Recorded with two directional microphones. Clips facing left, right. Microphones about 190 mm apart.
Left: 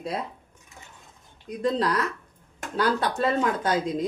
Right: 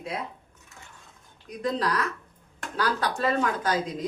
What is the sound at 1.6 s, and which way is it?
Speech, 30° left (ahead or behind).